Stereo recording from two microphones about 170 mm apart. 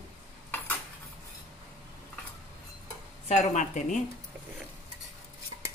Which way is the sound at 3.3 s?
45° left (ahead or behind).